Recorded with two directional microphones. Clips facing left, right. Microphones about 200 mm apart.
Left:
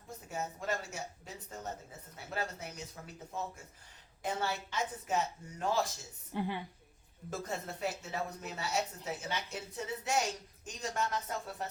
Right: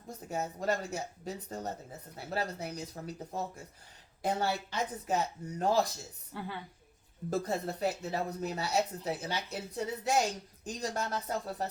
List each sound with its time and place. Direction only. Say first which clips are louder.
0.3 s speech: right 5 dB; 35° right (ahead or behind)
6.3 s a woman's voice: left 5 dB; 15° left (ahead or behind)
7.3 s speech: right 7 dB; 35° right (ahead or behind)